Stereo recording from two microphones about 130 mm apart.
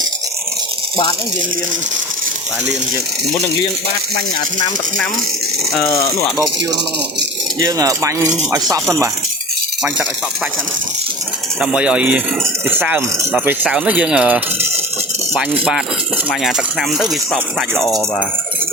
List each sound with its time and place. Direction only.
5.7 s speech: 20° left (ahead or behind)
7.6 s speech: 25° right (ahead or behind)
11.6 s speech: 10° right (ahead or behind)